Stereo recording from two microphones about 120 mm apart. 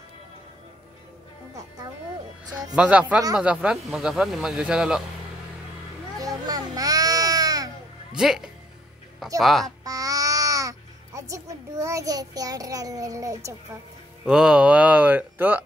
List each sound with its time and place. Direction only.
2.7 s speech: 10° right (ahead or behind)
6.1 s baby cry: 30° right (ahead or behind)
8.1 s speech: 5° right (ahead or behind)
9.8 s babbling: 30° right (ahead or behind)
14.2 s speech: 5° right (ahead or behind)